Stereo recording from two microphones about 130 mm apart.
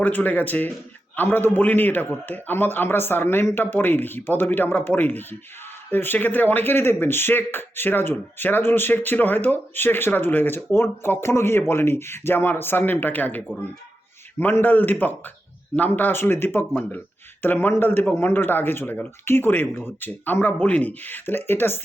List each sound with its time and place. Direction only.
0.0 s speech: 10° left (ahead or behind)